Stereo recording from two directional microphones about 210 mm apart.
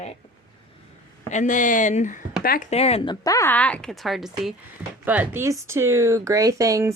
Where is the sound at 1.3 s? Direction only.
35° left (ahead or behind).